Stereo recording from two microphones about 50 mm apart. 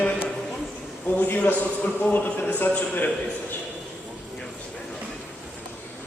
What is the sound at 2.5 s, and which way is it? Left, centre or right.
Speech, left.